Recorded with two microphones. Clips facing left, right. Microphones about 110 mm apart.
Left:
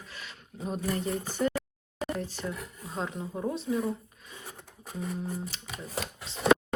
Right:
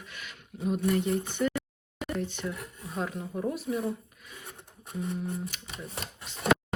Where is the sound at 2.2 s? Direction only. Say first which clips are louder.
Right 1 dB; 35° left (ahead or behind).